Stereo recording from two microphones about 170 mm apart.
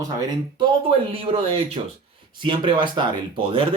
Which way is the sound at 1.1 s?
30° right (ahead or behind).